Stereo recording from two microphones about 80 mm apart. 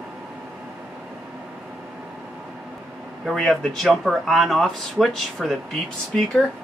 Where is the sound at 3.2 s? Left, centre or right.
Centre.